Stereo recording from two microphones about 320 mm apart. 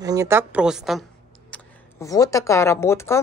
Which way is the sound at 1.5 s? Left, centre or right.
Centre.